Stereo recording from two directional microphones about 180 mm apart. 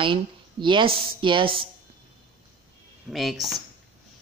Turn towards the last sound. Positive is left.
turn(degrees=0)  # may be behind; listen again after turning